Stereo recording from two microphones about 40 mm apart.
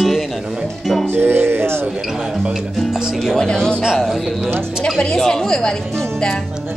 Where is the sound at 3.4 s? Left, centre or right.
Centre.